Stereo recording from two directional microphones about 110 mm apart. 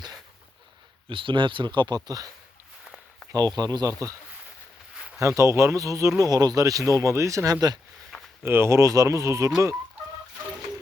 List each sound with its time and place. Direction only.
1.0 s speech: 50° right (ahead or behind)
2.0 s speech: 35° right (ahead or behind)
3.3 s speech: 35° right (ahead or behind)
4.9 s a sound: 5° right (ahead or behind)
5.4 s speech: 25° right (ahead or behind)
8.1 s a sound: centre (ahead or behind)
8.4 s speech: 20° right (ahead or behind)